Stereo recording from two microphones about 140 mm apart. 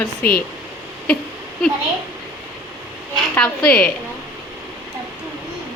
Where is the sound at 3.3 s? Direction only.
5° left (ahead or behind).